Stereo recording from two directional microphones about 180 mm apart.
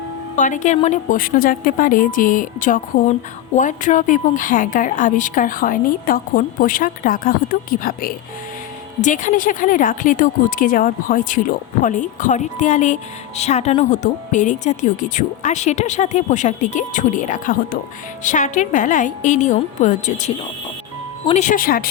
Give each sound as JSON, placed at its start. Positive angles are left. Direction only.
{"t": 0.3, "sound": "speech", "side_deg": 45}